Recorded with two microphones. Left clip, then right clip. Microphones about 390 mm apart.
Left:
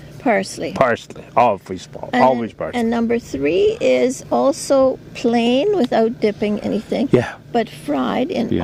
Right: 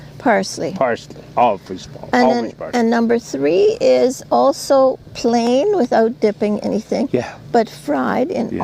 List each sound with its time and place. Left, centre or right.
0.2 s speech: right
1.4 s speech: left
2.7 s speech: right
7.1 s speech: left
7.5 s speech: right